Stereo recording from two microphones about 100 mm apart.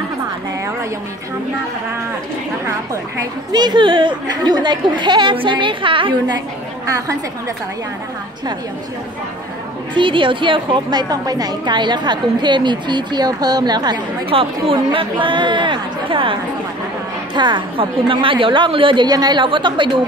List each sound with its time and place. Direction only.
2.6 s a woman's voice: 30° right (ahead or behind)
3.5 s a woman's voice: 50° right (ahead or behind)
9.9 s a woman's voice: 55° right (ahead or behind)
14.3 s speech: 65° right (ahead or behind)
17.3 s speech: 50° right (ahead or behind)
19.0 s a woman's voice: 40° right (ahead or behind)